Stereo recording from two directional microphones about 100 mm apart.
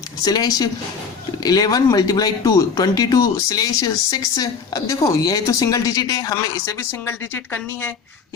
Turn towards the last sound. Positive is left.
turn(degrees=20)  # may be behind; listen again after turning